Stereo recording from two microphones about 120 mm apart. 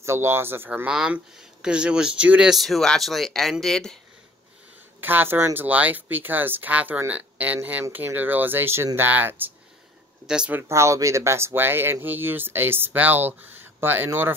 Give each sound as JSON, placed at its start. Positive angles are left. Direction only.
{"t": 0.0, "sound": "speech", "side_deg": -20}
{"t": 0.8, "sound": "speech", "side_deg": -5}
{"t": 5.0, "sound": "speech", "side_deg": -15}
{"t": 10.7, "sound": "speech", "side_deg": -25}